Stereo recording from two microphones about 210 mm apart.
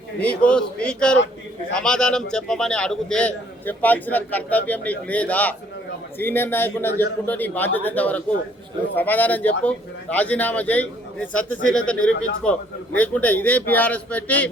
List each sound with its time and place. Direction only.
0.2 s a man's voice: 5° left (ahead or behind)
11.9 s a man's voice: 5° left (ahead or behind)